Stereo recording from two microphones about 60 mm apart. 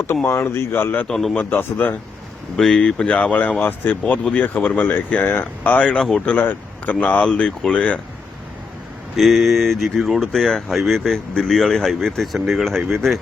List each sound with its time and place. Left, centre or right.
0.3 s speech: left
1.0 s a man's voice: centre
1.4 s speech: left
2.6 s speech: centre
6.0 s a man's voice: centre
6.2 s speech: left; by 7.8 s centre
9.1 s speech: centre